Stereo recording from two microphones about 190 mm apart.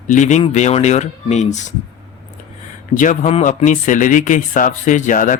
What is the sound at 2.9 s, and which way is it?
Speech, 40° left (ahead or behind).